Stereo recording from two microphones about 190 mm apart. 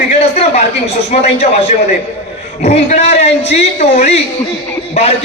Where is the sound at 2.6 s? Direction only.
35° left (ahead or behind).